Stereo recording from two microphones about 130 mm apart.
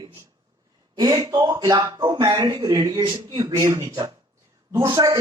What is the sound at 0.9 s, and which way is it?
A man's voice, 30° right (ahead or behind).